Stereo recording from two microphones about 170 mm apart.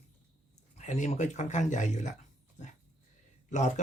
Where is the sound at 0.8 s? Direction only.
45° left (ahead or behind).